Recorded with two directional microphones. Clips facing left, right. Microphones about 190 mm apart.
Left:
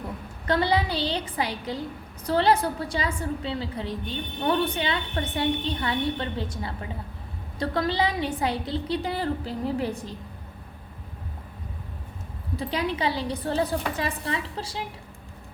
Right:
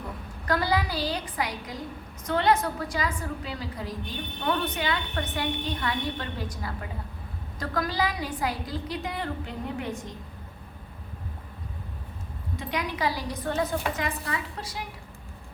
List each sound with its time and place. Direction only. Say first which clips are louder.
0.4 s a woman's voice: left 3 dB; 25° left (ahead or behind)
12.5 s a woman's voice: left 3 dB; 30° left (ahead or behind)